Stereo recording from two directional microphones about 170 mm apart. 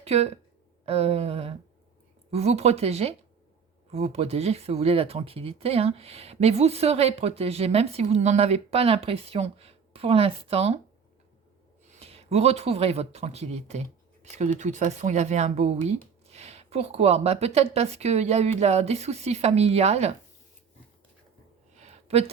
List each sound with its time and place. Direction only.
0.0 s speech: 35° right (ahead or behind)
11.9 s speech: 35° right (ahead or behind)
21.8 s a sound: 40° right (ahead or behind)